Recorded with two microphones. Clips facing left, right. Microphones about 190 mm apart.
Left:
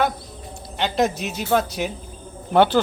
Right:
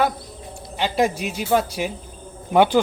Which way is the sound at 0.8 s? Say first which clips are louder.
Even; 5° right (ahead or behind).